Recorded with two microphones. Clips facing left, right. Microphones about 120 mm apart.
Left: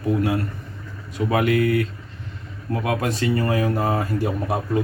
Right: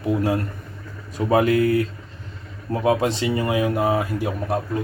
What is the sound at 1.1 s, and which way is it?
Speech, 35° right (ahead or behind).